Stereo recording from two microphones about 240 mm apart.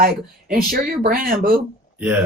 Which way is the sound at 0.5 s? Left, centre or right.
Right.